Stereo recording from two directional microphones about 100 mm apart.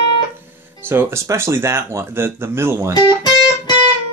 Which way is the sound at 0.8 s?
20° right (ahead or behind).